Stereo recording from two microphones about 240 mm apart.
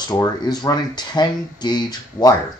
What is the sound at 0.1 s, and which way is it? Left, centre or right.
Speech, centre.